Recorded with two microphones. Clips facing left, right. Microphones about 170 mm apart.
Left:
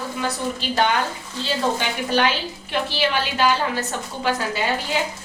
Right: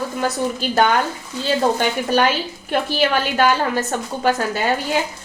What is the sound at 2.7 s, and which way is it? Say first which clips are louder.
A woman's voice: right 4 dB; 50° right (ahead or behind).